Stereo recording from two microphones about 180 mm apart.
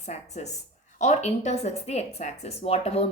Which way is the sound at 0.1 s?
40° left (ahead or behind).